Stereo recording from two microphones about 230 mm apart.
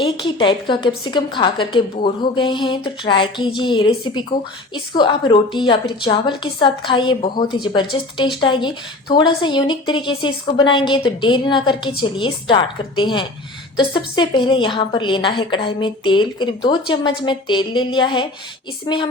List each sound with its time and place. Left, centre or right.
0.0 s a woman's voice: left